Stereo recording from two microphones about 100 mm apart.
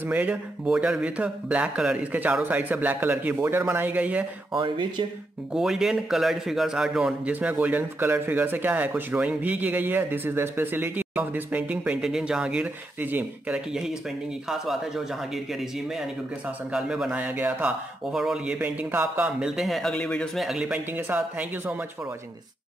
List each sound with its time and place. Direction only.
0.0 s speech: 15° right (ahead or behind)
4.6 s speech: 55° right (ahead or behind)
5.5 s a man's voice: 5° right (ahead or behind)
7.3 s speech: 15° right (ahead or behind)
14.5 s a man's voice: 5° right (ahead or behind); by 19.2 s 20° right (ahead or behind)
19.2 s a man's voice: 5° right (ahead or behind)
20.4 s a man's voice: 5° right (ahead or behind)
20.9 s speech: 15° right (ahead or behind)